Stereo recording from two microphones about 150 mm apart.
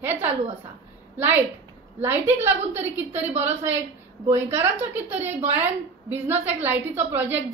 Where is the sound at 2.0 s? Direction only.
15° right (ahead or behind).